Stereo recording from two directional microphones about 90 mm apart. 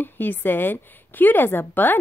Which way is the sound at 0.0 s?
20° left (ahead or behind).